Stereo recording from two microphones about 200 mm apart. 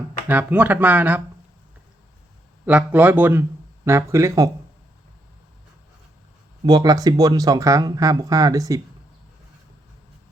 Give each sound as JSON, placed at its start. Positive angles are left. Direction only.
{"t": 0.3, "sound": "speech", "side_deg": -10}
{"t": 2.6, "sound": "speech", "side_deg": -10}
{"t": 6.7, "sound": "speech", "side_deg": -20}